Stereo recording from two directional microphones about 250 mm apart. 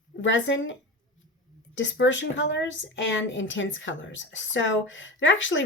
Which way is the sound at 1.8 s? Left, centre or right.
Left.